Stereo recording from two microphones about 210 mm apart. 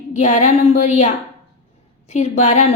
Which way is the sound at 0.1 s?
35° left (ahead or behind).